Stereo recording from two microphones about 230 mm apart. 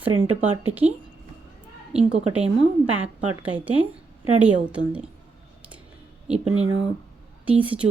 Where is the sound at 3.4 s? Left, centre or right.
Centre.